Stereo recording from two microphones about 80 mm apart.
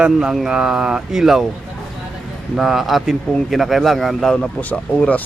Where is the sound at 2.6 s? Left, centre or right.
Centre.